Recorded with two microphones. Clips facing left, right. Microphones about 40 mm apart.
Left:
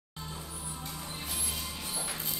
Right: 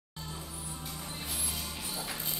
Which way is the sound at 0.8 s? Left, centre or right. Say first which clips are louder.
Even; centre.